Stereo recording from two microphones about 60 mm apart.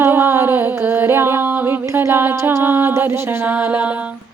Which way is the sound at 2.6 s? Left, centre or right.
Right.